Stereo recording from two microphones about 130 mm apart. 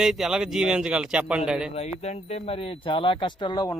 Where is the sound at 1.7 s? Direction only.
55° left (ahead or behind); by 3.8 s 30° left (ahead or behind).